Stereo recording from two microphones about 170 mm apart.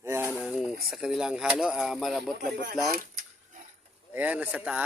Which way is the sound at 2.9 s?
50° right (ahead or behind).